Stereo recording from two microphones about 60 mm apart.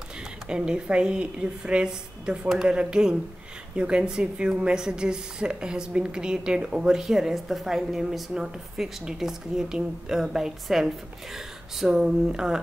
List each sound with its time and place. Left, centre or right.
0.5 s speech: centre